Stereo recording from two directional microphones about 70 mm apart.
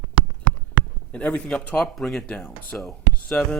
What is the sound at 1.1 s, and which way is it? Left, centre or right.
Speech, centre.